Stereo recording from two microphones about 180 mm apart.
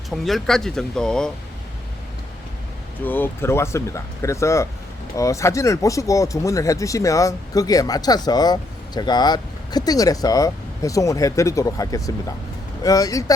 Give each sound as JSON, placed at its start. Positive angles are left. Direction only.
{"t": 0.3, "sound": "speech", "side_deg": 0}
{"t": 3.0, "sound": "speech", "side_deg": 10}